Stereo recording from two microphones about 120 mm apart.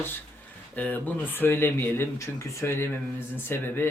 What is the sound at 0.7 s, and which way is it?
Speech, 15° left (ahead or behind).